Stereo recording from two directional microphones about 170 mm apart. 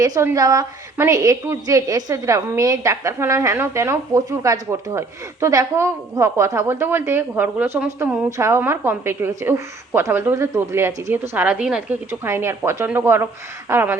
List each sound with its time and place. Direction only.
0.0 s a woman's voice: 20° right (ahead or behind)